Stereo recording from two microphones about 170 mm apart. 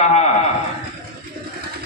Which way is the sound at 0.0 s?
40° left (ahead or behind).